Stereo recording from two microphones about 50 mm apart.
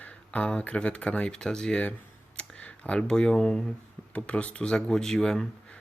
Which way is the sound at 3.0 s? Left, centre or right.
Centre.